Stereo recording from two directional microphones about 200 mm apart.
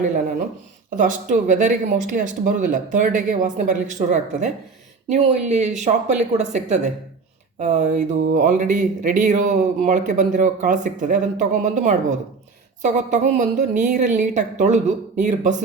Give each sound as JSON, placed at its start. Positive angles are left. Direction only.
{"t": 0.9, "sound": "speech", "side_deg": -40}